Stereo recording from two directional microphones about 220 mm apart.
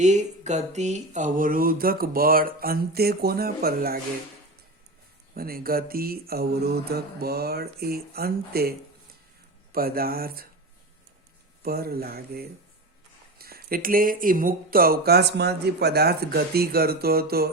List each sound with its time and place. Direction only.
0.0 s mantra: 30° right (ahead or behind)
5.3 s speech: 40° right (ahead or behind)
9.7 s speech: 40° right (ahead or behind)
11.6 s speech: 45° right (ahead or behind)